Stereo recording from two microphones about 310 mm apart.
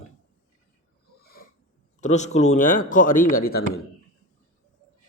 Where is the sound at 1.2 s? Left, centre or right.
Left.